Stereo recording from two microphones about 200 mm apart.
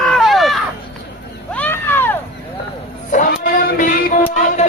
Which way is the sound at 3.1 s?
45° left (ahead or behind).